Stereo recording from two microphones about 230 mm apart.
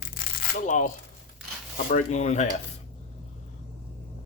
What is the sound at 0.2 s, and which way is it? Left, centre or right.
Shuffling cards, left.